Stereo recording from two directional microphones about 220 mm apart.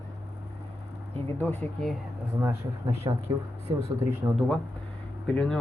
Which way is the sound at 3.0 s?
20° right (ahead or behind).